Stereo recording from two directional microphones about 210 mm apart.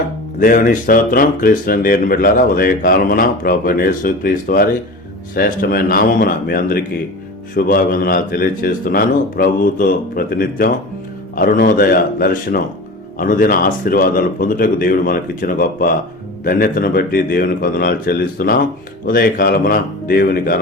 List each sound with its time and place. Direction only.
0.3 s speech: 40° left (ahead or behind)